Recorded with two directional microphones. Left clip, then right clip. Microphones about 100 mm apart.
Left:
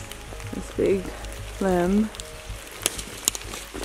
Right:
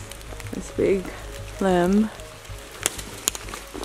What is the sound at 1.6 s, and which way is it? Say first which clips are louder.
Speech: right 2 dB; 35° right (ahead or behind).